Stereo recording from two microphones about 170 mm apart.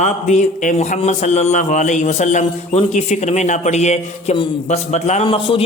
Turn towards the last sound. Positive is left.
turn(degrees=30)  # may be behind; listen again after turning